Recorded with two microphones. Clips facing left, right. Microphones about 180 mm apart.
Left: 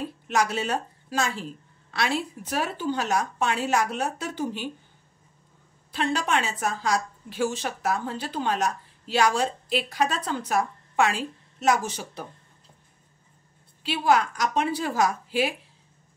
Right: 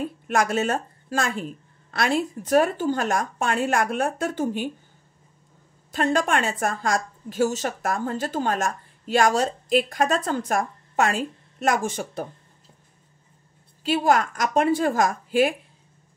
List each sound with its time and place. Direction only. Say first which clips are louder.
0.3 s a woman's voice: right 3 dB; 50° right (ahead or behind)
5.9 s a woman's voice: right 4 dB; 45° right (ahead or behind)
13.8 s a woman's voice: right 2 dB; 45° right (ahead or behind)